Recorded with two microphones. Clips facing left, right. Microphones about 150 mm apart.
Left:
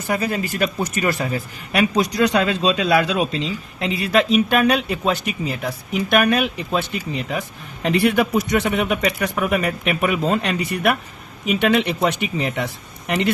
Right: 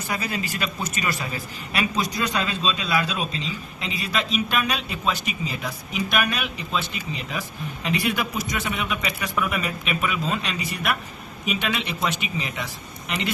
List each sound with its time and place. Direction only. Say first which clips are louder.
0.1 s speech: left 7 dB; 50° left (ahead or behind)